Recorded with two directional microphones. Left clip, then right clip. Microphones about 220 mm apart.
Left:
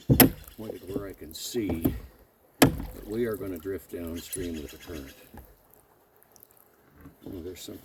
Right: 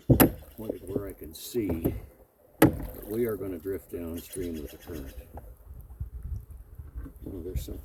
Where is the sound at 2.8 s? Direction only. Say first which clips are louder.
Right 1 dB; 50° right (ahead or behind).